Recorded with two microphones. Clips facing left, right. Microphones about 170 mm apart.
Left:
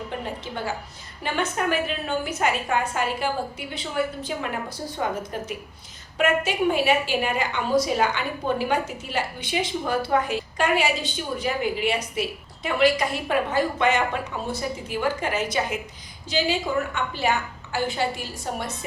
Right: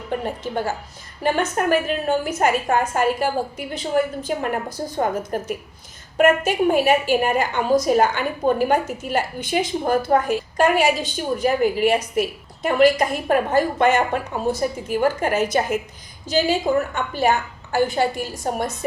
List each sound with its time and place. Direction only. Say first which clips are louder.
0.1 s music: right 9 dB; 45° right (ahead or behind)
0.4 s a woman's voice: right 5 dB; 45° right (ahead or behind)